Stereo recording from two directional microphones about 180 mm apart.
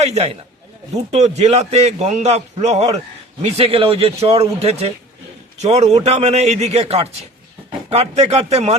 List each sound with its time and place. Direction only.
0.0 s a man's voice: 35° right (ahead or behind)